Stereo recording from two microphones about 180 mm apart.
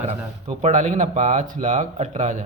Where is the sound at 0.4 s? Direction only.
40° right (ahead or behind).